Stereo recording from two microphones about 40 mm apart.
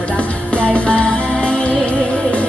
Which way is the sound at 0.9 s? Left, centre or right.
Left.